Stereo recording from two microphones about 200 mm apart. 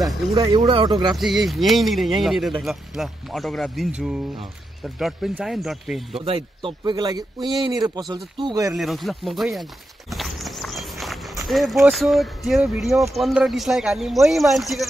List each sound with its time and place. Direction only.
0.3 s speech: 25° right (ahead or behind)
1.1 s speech: centre (ahead or behind)
6.1 s speech: 30° right (ahead or behind)
8.7 s walk: centre (ahead or behind)
11.4 s speech: centre (ahead or behind)